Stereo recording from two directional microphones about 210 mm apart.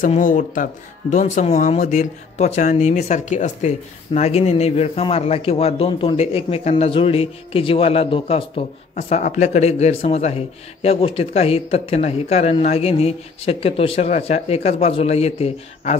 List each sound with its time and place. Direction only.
0.0 s speech: 40° left (ahead or behind)